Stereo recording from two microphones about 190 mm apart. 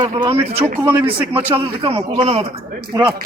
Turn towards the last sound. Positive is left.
turn(degrees=-20)  # may be behind; listen again after turning